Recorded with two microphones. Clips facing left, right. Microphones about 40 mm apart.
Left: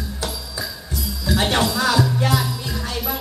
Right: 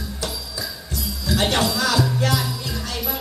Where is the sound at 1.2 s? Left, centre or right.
Centre.